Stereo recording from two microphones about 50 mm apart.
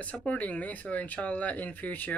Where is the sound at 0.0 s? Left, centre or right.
Left.